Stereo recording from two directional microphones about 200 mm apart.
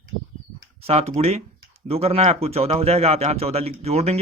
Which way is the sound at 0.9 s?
30° right (ahead or behind).